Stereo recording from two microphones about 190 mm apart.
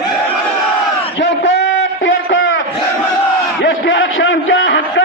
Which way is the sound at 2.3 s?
90° left.